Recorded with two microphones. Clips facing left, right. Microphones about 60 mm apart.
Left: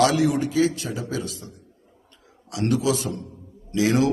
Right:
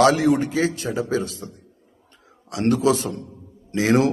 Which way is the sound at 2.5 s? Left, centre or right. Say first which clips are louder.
Right 4 dB; right.